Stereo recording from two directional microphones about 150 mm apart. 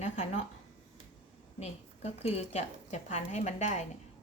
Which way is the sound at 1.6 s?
45° left (ahead or behind).